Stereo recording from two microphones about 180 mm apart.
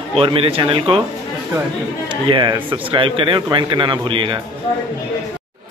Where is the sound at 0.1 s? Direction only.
30° right (ahead or behind).